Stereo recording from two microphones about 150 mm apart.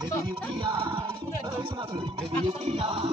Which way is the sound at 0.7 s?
35° right (ahead or behind).